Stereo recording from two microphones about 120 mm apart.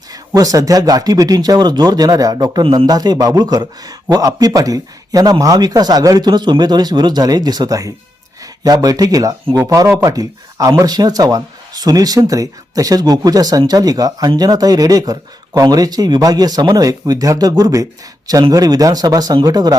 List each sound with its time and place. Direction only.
0.1 s speech: 30° right (ahead or behind)